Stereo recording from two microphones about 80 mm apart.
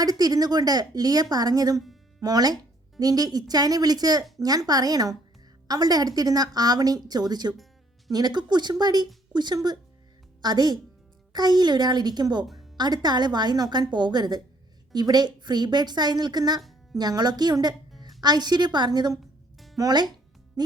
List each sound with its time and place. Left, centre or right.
0.0 s a woman's voice: right
7.5 s music: centre
8.1 s a woman's voice: right
16.6 s music: centre
17.0 s a woman's voice: right